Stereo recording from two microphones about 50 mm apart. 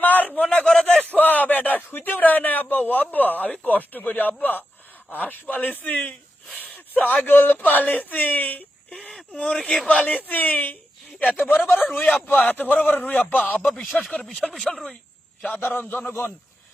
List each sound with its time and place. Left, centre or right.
0.0 s a sound: left
0.7 s a man's voice: centre
1.2 s a sound: left
3.5 s speech: left
9.0 s speech: centre
10.1 s speech: left
11.7 s speech: centre
12.5 s speech: left
14.2 s speech: centre
15.5 s a man's voice: left